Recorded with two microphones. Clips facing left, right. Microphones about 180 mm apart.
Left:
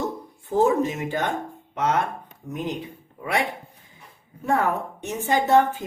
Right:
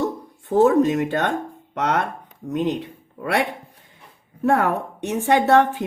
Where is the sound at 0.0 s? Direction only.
70° right (ahead or behind).